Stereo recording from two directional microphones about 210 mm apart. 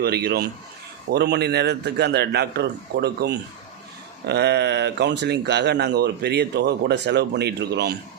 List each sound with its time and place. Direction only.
0.0 s a man's voice: 50° right (ahead or behind)